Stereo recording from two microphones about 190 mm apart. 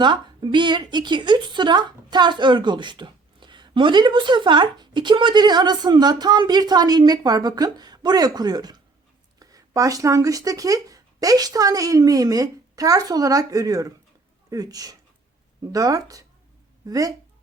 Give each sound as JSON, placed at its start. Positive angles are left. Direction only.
{"t": 0.0, "sound": "speech", "side_deg": -25}